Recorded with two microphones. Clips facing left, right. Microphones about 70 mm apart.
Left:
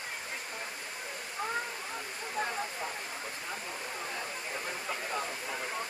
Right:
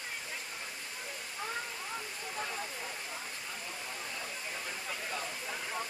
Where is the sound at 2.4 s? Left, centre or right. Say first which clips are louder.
Left 6 dB; left.